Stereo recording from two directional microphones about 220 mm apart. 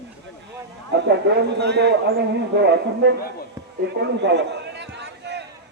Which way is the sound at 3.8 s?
50° right (ahead or behind).